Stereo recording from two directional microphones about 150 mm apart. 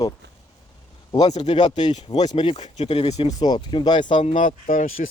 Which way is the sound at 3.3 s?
30° left (ahead or behind).